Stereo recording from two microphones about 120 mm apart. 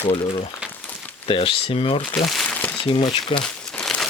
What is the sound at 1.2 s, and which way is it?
Speech, 50° left (ahead or behind).